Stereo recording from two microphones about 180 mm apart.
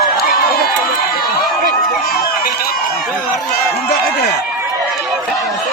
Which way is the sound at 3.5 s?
60° left (ahead or behind).